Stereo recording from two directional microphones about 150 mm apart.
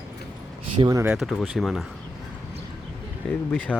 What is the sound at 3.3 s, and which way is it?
Speech, 10° left (ahead or behind).